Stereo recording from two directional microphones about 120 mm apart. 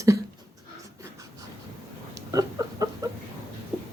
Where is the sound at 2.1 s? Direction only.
30° right (ahead or behind).